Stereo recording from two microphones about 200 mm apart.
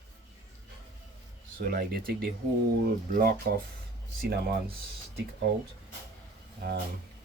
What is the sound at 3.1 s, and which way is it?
Speech, 45° right (ahead or behind).